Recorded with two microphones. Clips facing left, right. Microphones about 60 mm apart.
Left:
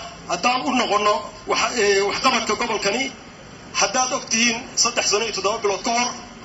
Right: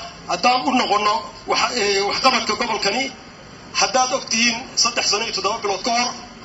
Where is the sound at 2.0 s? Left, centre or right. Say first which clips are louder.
Right 1 dB; centre.